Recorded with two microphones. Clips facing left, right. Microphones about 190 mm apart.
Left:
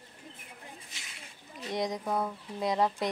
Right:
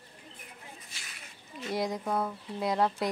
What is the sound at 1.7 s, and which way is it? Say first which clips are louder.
Speech: even; 5° right (ahead or behind).